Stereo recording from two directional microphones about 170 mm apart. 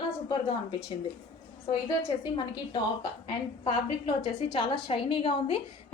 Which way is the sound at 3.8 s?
30° left (ahead or behind).